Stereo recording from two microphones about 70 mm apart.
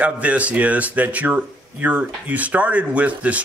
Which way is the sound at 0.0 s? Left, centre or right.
Centre.